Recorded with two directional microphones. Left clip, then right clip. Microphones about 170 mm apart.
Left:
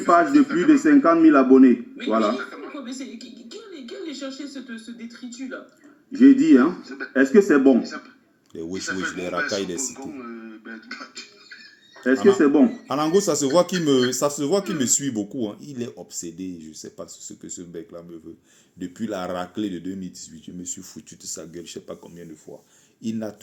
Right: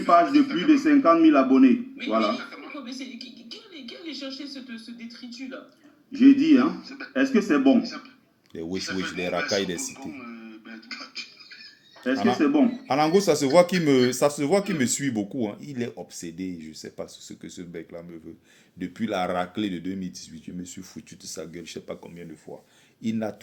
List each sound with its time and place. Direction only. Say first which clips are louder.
0.0 s a man's voice: left 2 dB; 50° left (ahead or behind)
8.5 s speech: left 1 dB; 10° right (ahead or behind)
8.8 s speech: left 4 dB; 50° left (ahead or behind)
9.1 s speech: right 3 dB; 10° right (ahead or behind)
9.9 s speech: left 3 dB; 50° left (ahead or behind)
12.9 s speech: even; 10° right (ahead or behind)